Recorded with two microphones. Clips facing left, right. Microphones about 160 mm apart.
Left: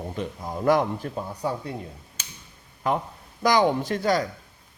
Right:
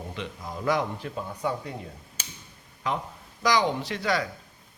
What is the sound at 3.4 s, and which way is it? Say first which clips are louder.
Speech: left 4 dB; 50° left (ahead or behind).